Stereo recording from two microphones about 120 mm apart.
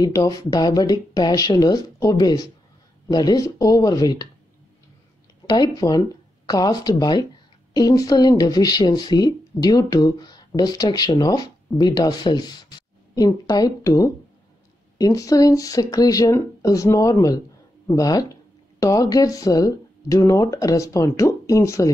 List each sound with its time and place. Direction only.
0.0 s speech: 30° left (ahead or behind)
5.5 s speech: 35° left (ahead or behind)